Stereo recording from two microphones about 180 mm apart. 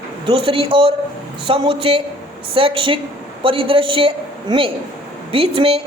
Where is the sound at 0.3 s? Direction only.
30° right (ahead or behind).